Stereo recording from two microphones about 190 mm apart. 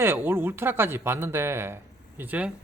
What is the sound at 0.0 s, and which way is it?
Speech, 10° right (ahead or behind).